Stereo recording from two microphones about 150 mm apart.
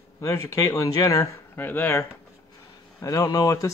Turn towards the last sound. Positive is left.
turn(degrees=25)  # may be behind; listen again after turning